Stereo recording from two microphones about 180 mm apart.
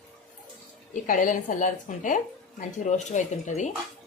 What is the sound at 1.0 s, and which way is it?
Speech, 45° left (ahead or behind).